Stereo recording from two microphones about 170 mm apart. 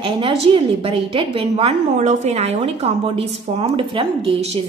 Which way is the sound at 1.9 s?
45° right (ahead or behind).